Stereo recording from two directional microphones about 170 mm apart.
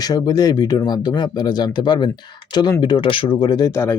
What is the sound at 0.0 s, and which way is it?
Speech, 20° left (ahead or behind).